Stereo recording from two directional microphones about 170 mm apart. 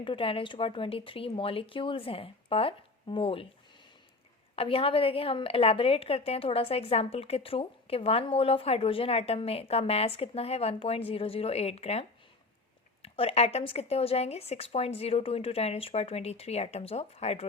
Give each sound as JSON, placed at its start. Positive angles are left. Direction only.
{"t": 0.0, "sound": "a woman's voice", "side_deg": 30}
{"t": 4.5, "sound": "a woman's voice", "side_deg": 35}